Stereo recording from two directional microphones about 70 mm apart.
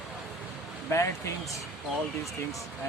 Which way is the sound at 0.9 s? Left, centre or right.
Left.